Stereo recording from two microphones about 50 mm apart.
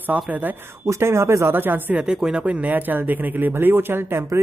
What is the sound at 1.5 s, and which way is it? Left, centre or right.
Speech, right.